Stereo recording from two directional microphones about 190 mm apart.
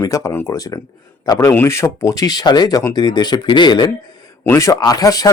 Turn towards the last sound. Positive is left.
turn(degrees=20)  # may be behind; listen again after turning